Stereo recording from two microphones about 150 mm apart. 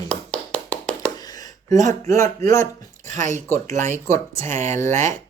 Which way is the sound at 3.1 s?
55° right (ahead or behind).